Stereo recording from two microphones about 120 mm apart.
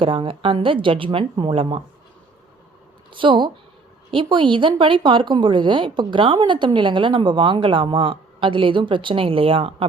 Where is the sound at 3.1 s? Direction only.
45° right (ahead or behind).